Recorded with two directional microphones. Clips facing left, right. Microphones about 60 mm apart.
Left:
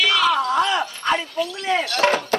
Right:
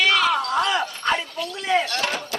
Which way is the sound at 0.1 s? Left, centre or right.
Right.